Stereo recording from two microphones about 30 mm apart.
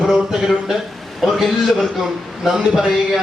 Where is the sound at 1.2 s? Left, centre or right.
Centre.